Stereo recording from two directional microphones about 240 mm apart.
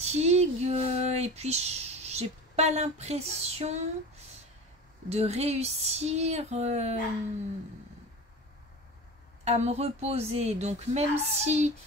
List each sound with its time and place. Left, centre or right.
0.0 s speech: right
5.1 s speech: right
9.4 s speech: right